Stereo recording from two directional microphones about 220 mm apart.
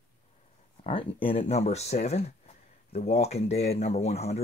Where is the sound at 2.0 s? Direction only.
30° left (ahead or behind).